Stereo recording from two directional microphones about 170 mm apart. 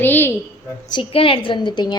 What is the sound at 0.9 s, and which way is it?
A woman's voice, 30° left (ahead or behind).